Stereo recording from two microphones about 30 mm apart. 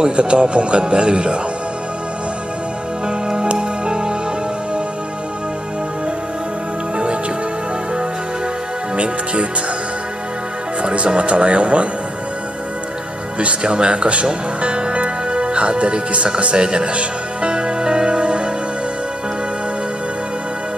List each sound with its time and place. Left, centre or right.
0.1 s a man's voice: right
3.1 s music: right
8.9 s a man's voice: right
10.8 s a man's voice: right
13.4 s speech: right
16.5 s music: right